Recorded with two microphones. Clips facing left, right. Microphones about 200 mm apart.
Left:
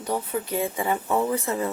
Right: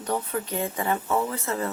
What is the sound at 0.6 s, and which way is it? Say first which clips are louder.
Speech: left 1 dB; 10° left (ahead or behind).